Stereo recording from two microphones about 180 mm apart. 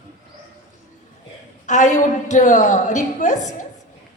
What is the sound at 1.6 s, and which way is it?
A woman's voice, 45° left (ahead or behind).